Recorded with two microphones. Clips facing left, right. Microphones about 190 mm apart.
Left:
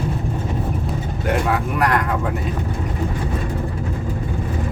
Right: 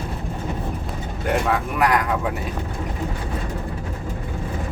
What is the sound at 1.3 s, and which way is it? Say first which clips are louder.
Vehicle: left 1 dB; centre (ahead or behind).